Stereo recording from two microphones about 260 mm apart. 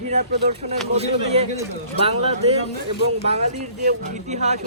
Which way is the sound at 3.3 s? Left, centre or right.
Right.